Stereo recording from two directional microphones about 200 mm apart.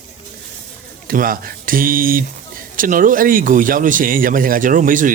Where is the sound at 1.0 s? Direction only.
45° right (ahead or behind).